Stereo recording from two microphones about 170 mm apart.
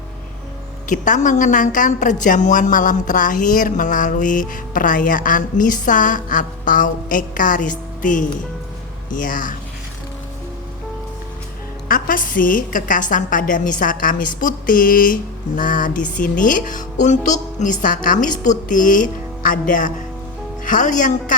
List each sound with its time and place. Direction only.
0.9 s a woman's voice: 50° left (ahead or behind)
11.9 s a woman's voice: 55° left (ahead or behind)